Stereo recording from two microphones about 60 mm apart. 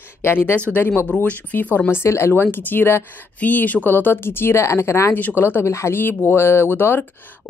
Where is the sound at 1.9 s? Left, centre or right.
Left.